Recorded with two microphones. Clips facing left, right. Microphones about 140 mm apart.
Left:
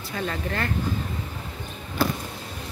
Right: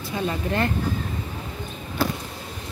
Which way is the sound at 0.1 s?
20° right (ahead or behind).